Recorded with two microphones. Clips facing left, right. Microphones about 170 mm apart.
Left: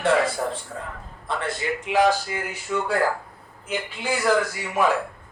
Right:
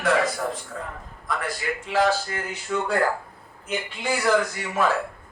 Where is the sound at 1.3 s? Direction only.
25° left (ahead or behind).